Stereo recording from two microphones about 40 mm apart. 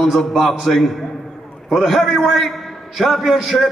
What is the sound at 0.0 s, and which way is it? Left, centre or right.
A man's voice, centre.